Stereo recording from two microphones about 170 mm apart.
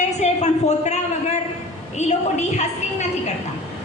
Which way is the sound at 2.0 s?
40° left (ahead or behind).